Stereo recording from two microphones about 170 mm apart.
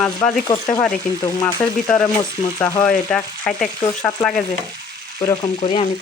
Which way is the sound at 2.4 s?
20° left (ahead or behind).